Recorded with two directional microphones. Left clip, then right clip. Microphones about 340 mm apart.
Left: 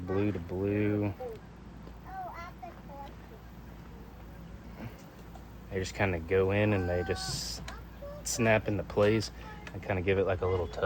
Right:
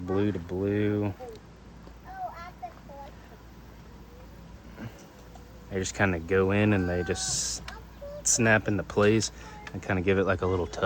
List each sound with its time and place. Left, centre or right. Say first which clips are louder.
0.1 s speech: right 3 dB; right
5.7 s speech: right 4 dB; right